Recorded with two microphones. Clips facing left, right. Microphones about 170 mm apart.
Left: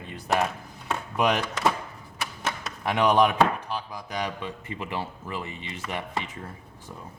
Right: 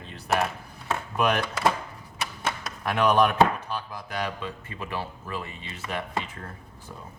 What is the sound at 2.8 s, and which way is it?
Speech, 15° left (ahead or behind).